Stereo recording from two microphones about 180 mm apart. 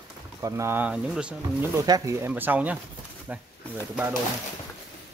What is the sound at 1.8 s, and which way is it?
Speech, 20° right (ahead or behind).